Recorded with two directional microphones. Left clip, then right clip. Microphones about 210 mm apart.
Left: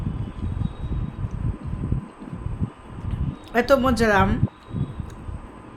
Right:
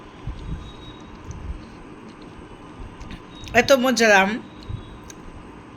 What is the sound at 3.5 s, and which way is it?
Speech, 15° left (ahead or behind).